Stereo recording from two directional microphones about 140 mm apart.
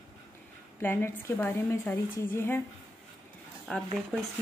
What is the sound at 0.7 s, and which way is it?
A woman's voice, 15° left (ahead or behind).